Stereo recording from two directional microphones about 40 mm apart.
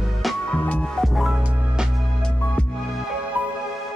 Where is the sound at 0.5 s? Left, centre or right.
Left.